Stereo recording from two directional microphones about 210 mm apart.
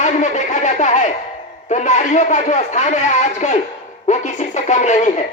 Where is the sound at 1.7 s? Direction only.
35° left (ahead or behind).